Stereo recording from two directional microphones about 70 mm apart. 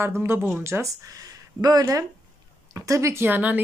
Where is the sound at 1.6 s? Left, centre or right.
Right.